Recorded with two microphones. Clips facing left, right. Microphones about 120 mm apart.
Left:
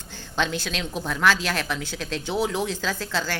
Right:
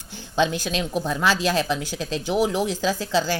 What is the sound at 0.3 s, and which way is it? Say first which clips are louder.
Speech: right 4 dB; 15° right (ahead or behind).